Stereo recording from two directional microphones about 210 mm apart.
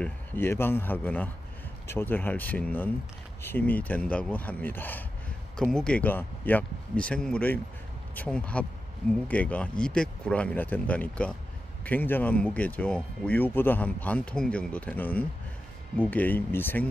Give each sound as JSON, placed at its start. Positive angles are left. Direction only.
{"t": 0.0, "sound": "speech", "side_deg": 10}